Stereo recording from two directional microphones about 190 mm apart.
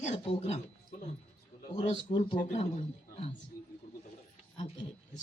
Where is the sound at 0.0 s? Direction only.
35° left (ahead or behind).